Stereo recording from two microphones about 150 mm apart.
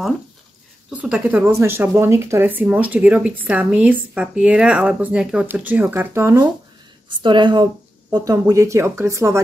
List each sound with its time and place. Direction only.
0.8 s speech: 5° right (ahead or behind)
7.1 s speech: 35° right (ahead or behind)